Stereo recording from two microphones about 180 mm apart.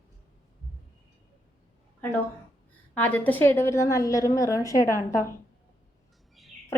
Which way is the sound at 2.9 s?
10° left (ahead or behind).